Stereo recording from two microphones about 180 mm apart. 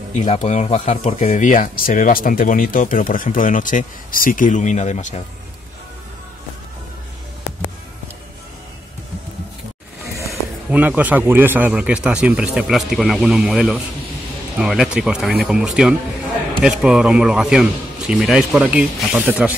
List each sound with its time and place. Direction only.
0.1 s speech: 40° left (ahead or behind)
10.1 s a man's voice: 10° right (ahead or behind)